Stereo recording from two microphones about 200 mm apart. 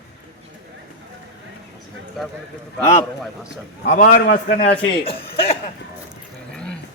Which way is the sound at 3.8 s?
45° left (ahead or behind).